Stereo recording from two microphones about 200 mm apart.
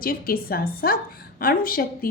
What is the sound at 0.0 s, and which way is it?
A woman's voice, 45° left (ahead or behind).